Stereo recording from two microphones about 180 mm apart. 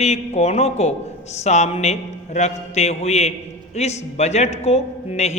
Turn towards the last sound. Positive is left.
turn(degrees=40)  # may be behind; listen again after turning